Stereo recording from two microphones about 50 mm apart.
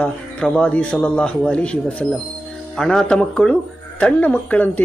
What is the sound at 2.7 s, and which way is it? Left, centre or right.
Speech, centre.